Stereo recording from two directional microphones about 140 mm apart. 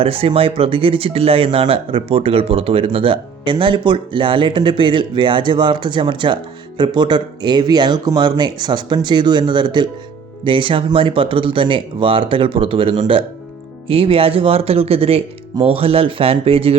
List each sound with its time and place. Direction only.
0.0 s speech: 40° right (ahead or behind)